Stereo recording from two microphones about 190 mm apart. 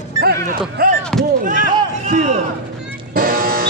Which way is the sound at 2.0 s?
35° right (ahead or behind).